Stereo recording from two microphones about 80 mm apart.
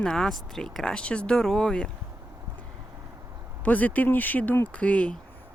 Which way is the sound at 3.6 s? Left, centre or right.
Centre.